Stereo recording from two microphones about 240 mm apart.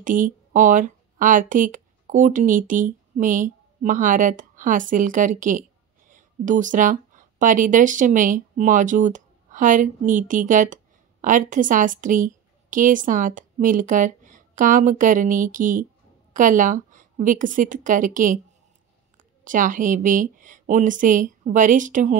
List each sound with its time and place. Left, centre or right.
0.0 s speech: right
19.4 s speech: right